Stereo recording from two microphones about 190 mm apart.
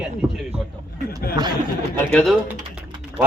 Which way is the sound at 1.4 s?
20° right (ahead or behind).